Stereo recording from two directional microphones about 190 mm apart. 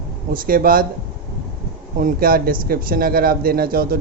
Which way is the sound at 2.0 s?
50° right (ahead or behind).